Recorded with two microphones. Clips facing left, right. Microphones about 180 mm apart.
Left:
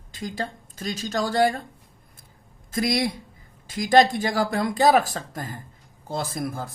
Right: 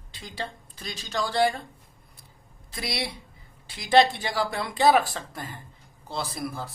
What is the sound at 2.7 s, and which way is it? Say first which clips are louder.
Speech: left 9 dB; 45° left (ahead or behind).